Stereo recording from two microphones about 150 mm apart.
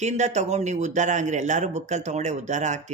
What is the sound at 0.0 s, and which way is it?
A man's voice, 50° right (ahead or behind).